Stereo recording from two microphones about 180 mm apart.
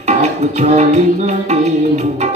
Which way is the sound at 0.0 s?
35° right (ahead or behind).